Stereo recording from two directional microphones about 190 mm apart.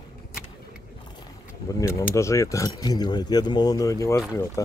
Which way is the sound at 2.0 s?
15° left (ahead or behind).